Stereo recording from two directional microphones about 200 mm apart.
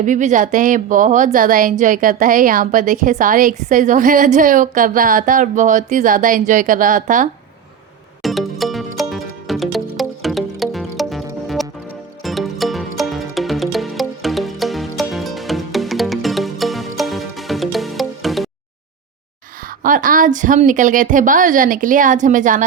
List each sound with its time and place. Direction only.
0.0 s a woman's voice: 40° right (ahead or behind)
8.2 s music: centre (ahead or behind)
19.8 s a woman's voice: 40° right (ahead or behind)